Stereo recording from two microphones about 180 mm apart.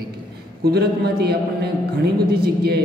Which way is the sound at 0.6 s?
65° right (ahead or behind).